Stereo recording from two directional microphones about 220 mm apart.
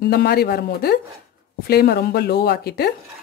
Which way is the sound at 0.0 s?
45° left (ahead or behind).